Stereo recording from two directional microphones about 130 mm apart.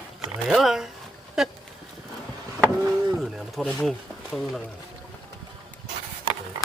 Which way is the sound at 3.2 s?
Centre (ahead or behind).